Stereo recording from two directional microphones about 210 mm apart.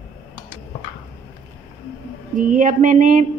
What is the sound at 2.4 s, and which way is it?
Speech, 40° right (ahead or behind).